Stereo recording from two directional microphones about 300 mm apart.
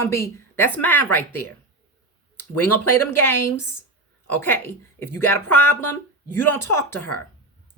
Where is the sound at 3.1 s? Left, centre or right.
Centre.